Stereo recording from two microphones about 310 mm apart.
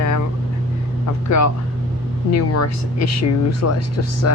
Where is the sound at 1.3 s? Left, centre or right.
Left.